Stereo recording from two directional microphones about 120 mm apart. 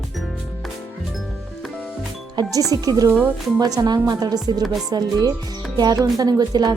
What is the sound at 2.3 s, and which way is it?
Speech, 30° right (ahead or behind).